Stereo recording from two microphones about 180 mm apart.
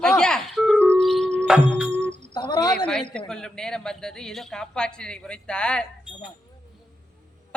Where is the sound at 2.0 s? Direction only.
80° right.